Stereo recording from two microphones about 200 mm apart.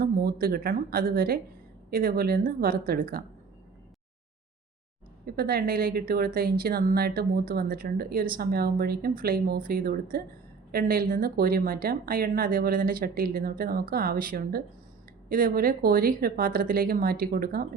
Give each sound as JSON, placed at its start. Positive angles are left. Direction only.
{"t": 0.0, "sound": "speech", "side_deg": -50}
{"t": 5.2, "sound": "speech", "side_deg": -50}